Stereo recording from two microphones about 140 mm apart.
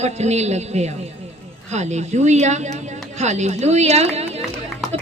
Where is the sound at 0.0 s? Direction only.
50° right (ahead or behind).